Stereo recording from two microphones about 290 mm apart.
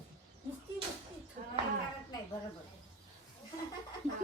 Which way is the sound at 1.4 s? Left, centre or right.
Right.